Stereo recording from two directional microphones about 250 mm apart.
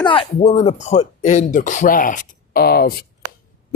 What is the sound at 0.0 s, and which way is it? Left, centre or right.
Speech, left.